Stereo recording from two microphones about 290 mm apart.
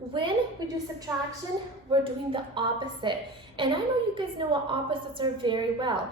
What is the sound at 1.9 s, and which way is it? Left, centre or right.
A woman's voice, centre.